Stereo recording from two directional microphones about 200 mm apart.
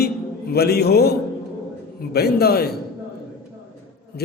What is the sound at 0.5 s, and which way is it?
A man's voice, 50° left (ahead or behind).